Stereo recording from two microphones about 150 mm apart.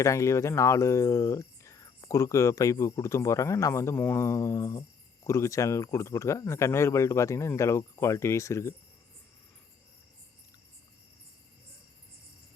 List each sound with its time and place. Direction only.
0.0 s speech: 20° left (ahead or behind)